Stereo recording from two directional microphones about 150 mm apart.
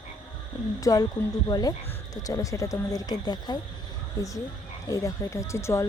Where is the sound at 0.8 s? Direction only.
25° left (ahead or behind).